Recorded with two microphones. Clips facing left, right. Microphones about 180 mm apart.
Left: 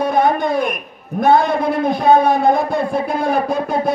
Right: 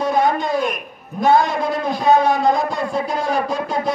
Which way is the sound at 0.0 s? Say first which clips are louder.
Left 2 dB; 55° left (ahead or behind).